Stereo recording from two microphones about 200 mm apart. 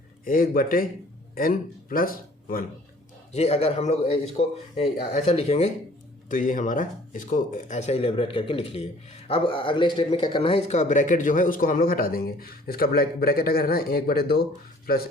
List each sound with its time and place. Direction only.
0.3 s a man's voice: 45° left (ahead or behind)
3.3 s a man's voice: 30° left (ahead or behind); by 15.0 s 50° left (ahead or behind)